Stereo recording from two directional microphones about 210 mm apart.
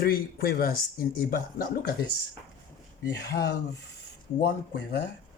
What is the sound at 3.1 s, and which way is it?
Speech, 55° left (ahead or behind).